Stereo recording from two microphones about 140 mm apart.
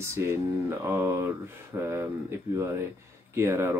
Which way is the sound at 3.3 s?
20° right (ahead or behind).